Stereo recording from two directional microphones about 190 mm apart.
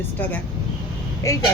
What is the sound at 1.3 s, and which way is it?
Speech, 15° left (ahead or behind).